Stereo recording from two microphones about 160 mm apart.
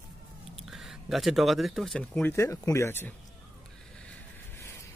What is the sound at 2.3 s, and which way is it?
Speech, 20° left (ahead or behind).